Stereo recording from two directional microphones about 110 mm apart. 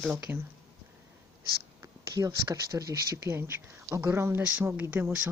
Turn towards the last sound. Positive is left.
turn(degrees=-15)  # may be behind; listen again after turning